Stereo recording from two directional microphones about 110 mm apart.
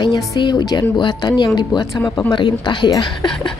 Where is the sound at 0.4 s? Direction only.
40° left (ahead or behind).